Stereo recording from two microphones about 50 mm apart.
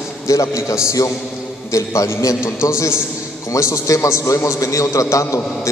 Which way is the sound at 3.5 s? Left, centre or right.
Left.